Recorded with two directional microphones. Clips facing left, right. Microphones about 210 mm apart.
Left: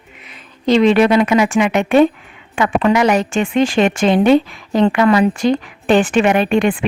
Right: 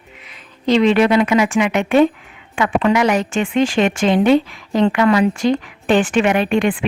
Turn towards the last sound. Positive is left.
turn(degrees=35)  # may be behind; listen again after turning